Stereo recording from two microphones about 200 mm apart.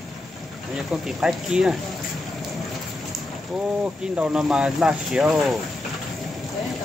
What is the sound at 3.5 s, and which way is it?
Speech, 5° right (ahead or behind).